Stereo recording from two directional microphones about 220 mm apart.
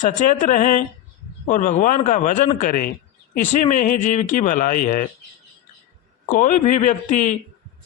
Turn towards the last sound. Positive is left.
turn(degrees=35)  # may be behind; listen again after turning